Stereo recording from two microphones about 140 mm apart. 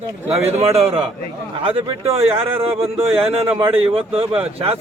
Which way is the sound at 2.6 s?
45° right (ahead or behind).